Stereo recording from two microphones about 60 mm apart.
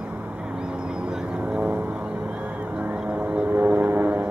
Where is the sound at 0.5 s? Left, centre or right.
Centre.